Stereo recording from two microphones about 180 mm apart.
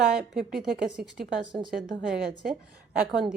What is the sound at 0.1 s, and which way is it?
Speech, 5° right (ahead or behind).